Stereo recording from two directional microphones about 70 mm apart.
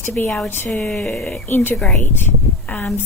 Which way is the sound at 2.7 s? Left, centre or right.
Left.